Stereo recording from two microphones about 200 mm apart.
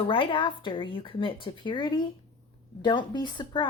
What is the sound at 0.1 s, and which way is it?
A woman's voice, 25° left (ahead or behind).